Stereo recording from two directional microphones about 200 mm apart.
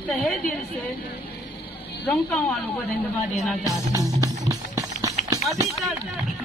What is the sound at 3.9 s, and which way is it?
Music, 15° right (ahead or behind).